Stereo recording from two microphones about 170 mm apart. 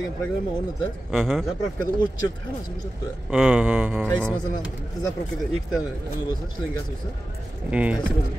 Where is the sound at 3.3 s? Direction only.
5° right (ahead or behind).